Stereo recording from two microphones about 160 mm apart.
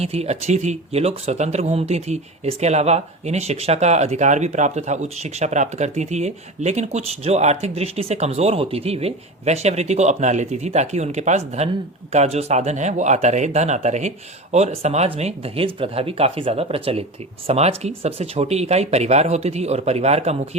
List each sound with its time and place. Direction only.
0.0 s speech: 40° right (ahead or behind)